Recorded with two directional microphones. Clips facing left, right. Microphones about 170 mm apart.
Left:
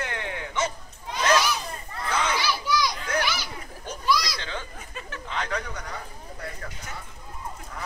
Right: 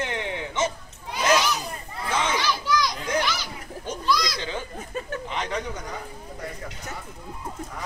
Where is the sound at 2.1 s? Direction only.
20° right (ahead or behind).